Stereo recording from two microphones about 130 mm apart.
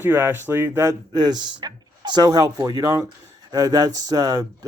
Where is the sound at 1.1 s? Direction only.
35° right (ahead or behind).